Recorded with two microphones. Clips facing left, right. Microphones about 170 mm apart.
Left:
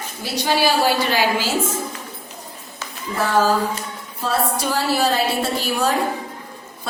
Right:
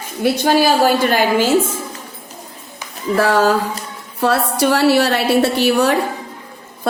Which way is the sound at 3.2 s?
70° right (ahead or behind).